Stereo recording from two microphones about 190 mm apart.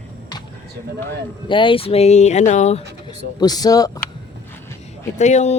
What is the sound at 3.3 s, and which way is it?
Speech, 20° left (ahead or behind).